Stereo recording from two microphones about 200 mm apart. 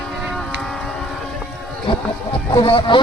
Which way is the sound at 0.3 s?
5° left (ahead or behind).